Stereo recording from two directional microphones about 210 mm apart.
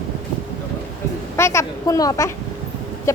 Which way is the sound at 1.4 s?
15° left (ahead or behind).